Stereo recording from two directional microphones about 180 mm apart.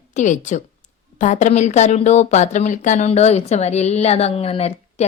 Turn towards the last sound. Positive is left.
turn(degrees=35)  # may be behind; listen again after turning